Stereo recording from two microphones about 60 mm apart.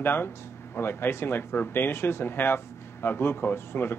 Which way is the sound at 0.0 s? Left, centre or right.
Left.